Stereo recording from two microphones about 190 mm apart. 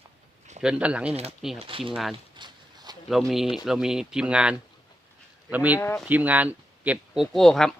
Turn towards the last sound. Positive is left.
turn(degrees=0)  # may be behind; listen again after turning